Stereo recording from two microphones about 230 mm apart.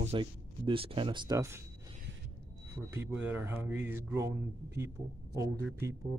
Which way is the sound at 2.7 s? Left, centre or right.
Centre.